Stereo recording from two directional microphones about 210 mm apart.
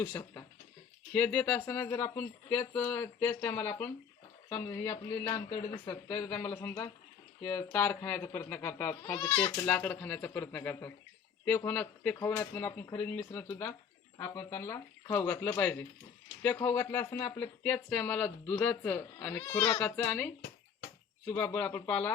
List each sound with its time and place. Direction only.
0.0 s speech: 10° left (ahead or behind)